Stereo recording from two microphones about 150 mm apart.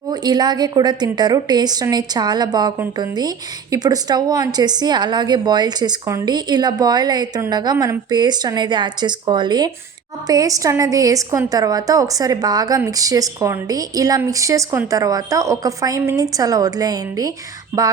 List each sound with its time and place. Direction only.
0.1 s a woman's voice: 25° right (ahead or behind)